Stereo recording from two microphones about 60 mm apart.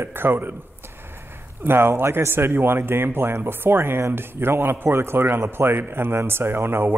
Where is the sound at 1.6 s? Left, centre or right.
Right.